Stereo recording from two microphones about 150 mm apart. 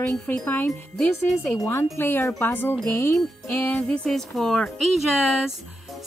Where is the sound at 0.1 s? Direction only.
10° left (ahead or behind).